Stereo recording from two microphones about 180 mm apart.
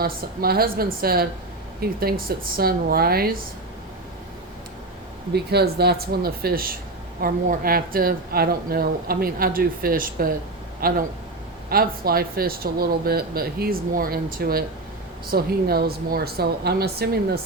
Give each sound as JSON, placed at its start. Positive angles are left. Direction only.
{"t": 0.0, "sound": "a woman's voice", "side_deg": -60}
{"t": 5.3, "sound": "a woman's voice", "side_deg": -65}